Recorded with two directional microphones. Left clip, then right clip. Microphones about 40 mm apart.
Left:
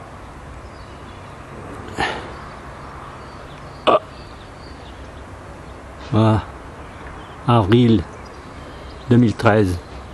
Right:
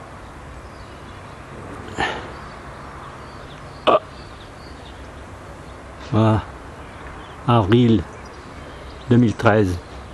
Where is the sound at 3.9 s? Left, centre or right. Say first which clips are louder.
Left 1 dB; left.